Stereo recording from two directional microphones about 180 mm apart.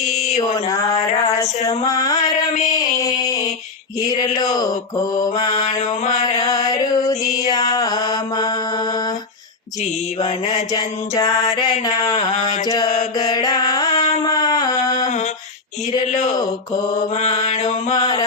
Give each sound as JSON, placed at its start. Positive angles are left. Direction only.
{"t": 0.2, "sound": "mantra", "side_deg": 40}
{"t": 1.8, "sound": "mantra", "side_deg": 20}
{"t": 6.4, "sound": "mantra", "side_deg": 20}
{"t": 10.2, "sound": "mantra", "side_deg": 35}
{"t": 10.7, "sound": "mantra", "side_deg": 20}
{"t": 13.1, "sound": "music", "side_deg": 20}
{"t": 14.4, "sound": "a sound", "side_deg": 20}
{"t": 16.1, "sound": "mantra", "side_deg": 40}
{"t": 17.9, "sound": "music", "side_deg": 20}